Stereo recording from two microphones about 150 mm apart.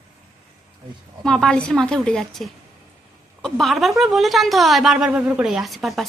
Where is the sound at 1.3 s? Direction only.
5° left (ahead or behind).